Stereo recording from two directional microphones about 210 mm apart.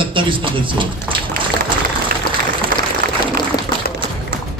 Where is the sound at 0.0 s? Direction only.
25° right (ahead or behind).